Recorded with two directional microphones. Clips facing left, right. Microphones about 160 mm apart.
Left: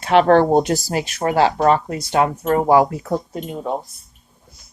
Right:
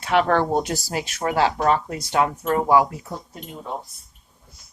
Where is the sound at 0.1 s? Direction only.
30° left (ahead or behind).